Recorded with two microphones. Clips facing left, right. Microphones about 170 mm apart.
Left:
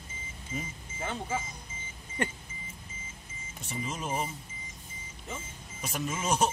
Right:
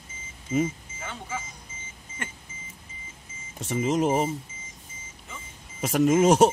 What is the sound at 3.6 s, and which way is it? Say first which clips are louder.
Speech: right 13 dB; 90° right.